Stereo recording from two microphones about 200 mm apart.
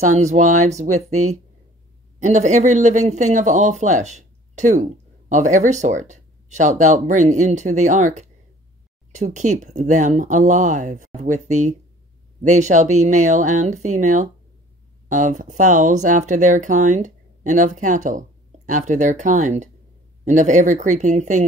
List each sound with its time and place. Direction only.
0.2 s speech: 35° right (ahead or behind)
2.2 s speech: 35° right (ahead or behind)